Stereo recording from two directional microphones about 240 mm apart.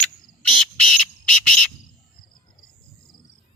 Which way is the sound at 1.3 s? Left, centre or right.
Centre.